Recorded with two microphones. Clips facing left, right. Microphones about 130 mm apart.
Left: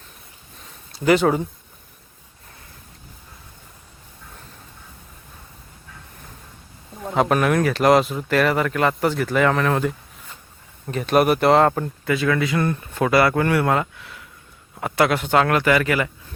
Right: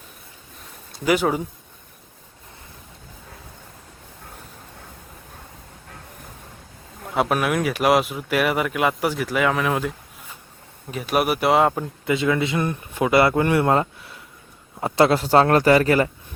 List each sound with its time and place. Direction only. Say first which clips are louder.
0.9 s speech: left 3 dB; 10° right (ahead or behind)
7.1 s speech: left 3 dB; 5° right (ahead or behind)
12.0 s a man's voice: even; 20° right (ahead or behind)